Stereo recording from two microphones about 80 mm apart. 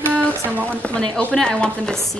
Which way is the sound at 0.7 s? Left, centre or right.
Centre.